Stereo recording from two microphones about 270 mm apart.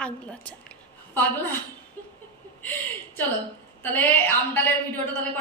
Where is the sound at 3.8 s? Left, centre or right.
Centre.